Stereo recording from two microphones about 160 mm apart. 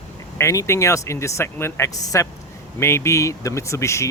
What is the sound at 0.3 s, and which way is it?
Speech, 15° left (ahead or behind).